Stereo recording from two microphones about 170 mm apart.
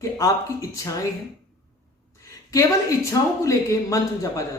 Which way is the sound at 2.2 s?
20° left (ahead or behind).